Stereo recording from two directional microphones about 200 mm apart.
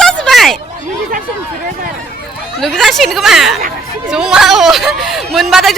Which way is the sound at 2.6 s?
Centre (ahead or behind).